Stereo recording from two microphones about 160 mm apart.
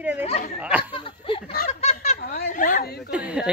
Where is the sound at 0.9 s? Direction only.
35° left (ahead or behind).